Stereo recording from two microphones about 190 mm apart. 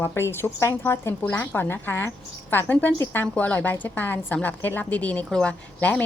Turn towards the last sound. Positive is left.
turn(degrees=5)  # may be behind; listen again after turning